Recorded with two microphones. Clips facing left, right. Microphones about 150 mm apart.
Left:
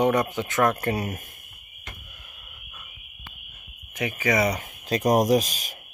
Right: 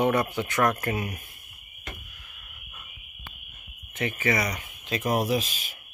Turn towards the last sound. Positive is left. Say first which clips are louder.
# left 6 dB
turn(degrees=40)  # may be behind; listen again after turning